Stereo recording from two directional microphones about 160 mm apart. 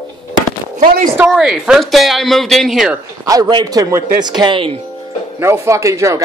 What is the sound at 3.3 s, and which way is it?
A man's voice, 25° right (ahead or behind).